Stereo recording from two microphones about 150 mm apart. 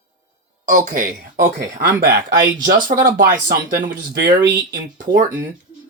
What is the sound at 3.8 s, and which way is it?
Speech, 80° right.